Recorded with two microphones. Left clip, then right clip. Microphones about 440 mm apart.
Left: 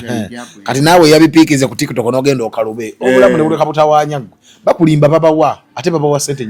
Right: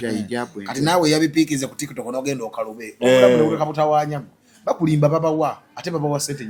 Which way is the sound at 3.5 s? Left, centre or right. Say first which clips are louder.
Left 9 dB; left.